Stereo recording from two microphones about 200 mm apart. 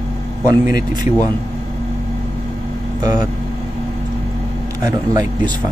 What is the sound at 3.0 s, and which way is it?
Speech, 20° right (ahead or behind).